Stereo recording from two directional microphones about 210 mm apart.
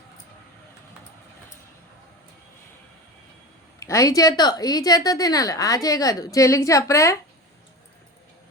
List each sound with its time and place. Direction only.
3.8 s a woman's voice: 15° left (ahead or behind)